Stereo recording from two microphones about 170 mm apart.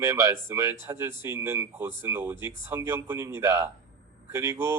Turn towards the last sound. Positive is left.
turn(degrees=-15)  # may be behind; listen again after turning